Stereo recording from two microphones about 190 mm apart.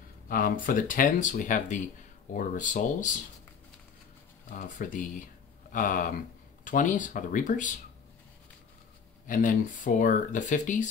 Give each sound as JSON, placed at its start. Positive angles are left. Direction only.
{"t": 0.3, "sound": "speech", "side_deg": 45}
{"t": 4.5, "sound": "speech", "side_deg": 40}
{"t": 9.3, "sound": "speech", "side_deg": 45}